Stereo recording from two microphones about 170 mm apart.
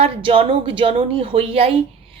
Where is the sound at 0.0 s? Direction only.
30° right (ahead or behind).